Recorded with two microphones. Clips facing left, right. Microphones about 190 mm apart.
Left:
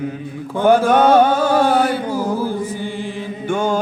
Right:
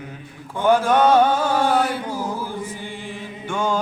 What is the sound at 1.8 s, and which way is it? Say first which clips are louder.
Chant: left 5 dB; 90° left.